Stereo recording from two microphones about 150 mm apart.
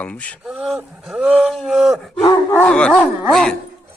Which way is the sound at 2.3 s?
20° left (ahead or behind).